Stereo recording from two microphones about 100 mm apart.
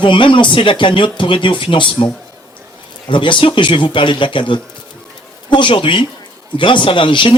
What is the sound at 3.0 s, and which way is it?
A man's voice, 55° left (ahead or behind).